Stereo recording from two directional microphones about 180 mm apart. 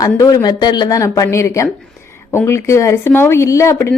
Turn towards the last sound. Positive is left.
turn(degrees=15)  # may be behind; listen again after turning